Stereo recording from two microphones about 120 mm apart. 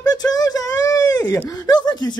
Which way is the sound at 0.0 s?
30° left (ahead or behind).